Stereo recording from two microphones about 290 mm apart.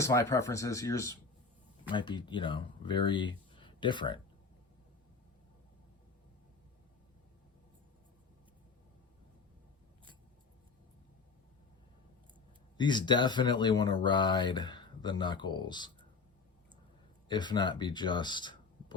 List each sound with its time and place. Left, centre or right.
0.0 s speech: centre
12.7 s speech: centre
17.2 s speech: centre